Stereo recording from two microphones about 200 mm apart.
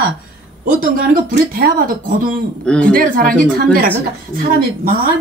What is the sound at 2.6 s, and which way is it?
Speech, 5° left (ahead or behind).